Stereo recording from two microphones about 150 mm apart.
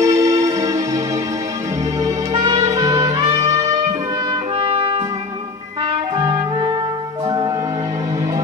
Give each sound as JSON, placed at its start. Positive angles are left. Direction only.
{"t": 0.0, "sound": "music", "side_deg": -20}
{"t": 2.0, "sound": "music", "side_deg": -25}
{"t": 4.7, "sound": "music", "side_deg": -35}
{"t": 6.1, "sound": "clarinet", "side_deg": -25}